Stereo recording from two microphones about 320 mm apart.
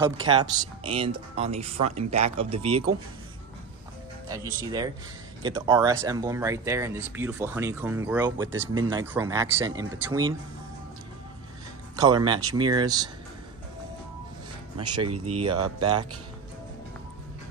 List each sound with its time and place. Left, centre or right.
0.0 s speech: centre
4.3 s speech: centre
12.0 s speech: centre
14.8 s speech: centre